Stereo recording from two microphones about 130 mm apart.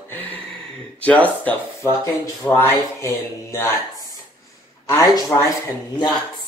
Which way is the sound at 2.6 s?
20° left (ahead or behind).